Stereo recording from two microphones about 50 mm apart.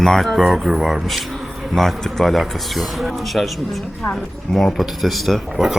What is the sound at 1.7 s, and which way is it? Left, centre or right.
Speech, centre.